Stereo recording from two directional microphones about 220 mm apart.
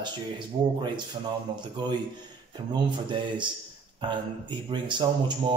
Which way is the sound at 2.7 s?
20° right (ahead or behind).